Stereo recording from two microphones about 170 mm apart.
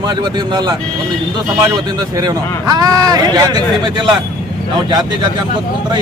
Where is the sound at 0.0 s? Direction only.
25° right (ahead or behind).